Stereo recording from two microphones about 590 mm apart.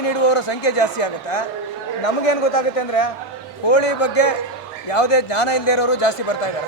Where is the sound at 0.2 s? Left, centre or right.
Left.